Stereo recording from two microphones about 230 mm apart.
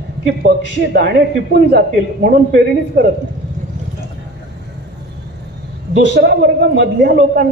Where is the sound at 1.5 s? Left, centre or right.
Right.